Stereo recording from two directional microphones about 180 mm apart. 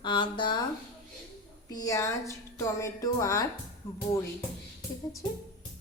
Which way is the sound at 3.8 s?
30° left (ahead or behind).